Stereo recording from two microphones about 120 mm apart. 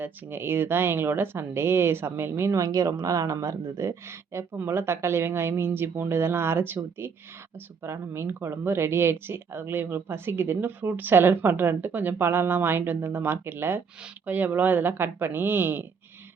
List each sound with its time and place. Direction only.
0.0 s speech: 20° right (ahead or behind)
7.9 s a woman's voice: 20° right (ahead or behind)